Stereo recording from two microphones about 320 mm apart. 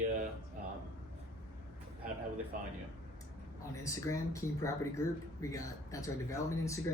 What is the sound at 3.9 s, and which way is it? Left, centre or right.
Speech, centre.